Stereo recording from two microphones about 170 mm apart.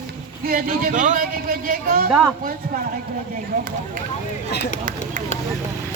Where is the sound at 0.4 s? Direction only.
60° right (ahead or behind).